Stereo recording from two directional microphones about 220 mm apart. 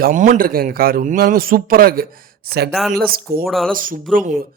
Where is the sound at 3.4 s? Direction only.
Centre (ahead or behind).